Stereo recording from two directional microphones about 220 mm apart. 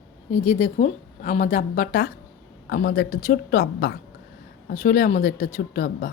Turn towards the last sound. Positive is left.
turn(degrees=40)  # may be behind; listen again after turning